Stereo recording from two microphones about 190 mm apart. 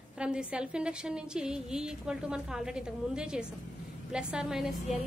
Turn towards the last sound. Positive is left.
turn(degrees=0)  # may be behind; listen again after turning